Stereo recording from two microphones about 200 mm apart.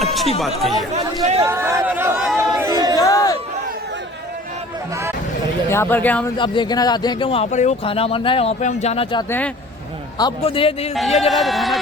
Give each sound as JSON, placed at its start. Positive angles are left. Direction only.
{"t": 0.0, "sound": "speech", "side_deg": 0}
{"t": 1.4, "sound": "speech", "side_deg": -10}
{"t": 2.4, "sound": "chatter", "side_deg": -15}
{"t": 3.0, "sound": "a sound", "side_deg": 15}
{"t": 5.6, "sound": "speech", "side_deg": 10}
{"t": 6.3, "sound": "speech", "side_deg": 25}
{"t": 11.2, "sound": "speech", "side_deg": 0}